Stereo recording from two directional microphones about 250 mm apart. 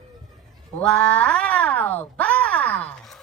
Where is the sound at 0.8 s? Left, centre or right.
Centre.